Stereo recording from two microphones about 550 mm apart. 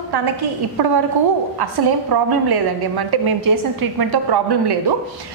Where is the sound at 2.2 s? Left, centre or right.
Right.